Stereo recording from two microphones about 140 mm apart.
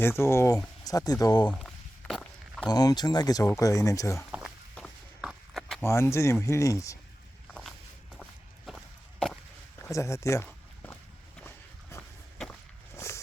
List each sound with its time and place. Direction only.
0.0 s speech: 20° left (ahead or behind)
1.5 s walk: 5° left (ahead or behind)
2.6 s speech: 30° left (ahead or behind)
4.3 s a sound: 5° right (ahead or behind)
5.8 s speech: 20° left (ahead or behind)
7.4 s walk: 5° left (ahead or behind)
9.8 s a sound: 20° left (ahead or behind)
11.4 s walk: 20° left (ahead or behind)